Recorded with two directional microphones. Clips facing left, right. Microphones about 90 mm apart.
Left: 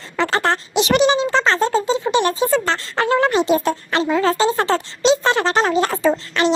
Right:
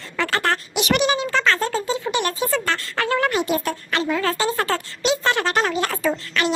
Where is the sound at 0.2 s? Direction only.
30° left (ahead or behind).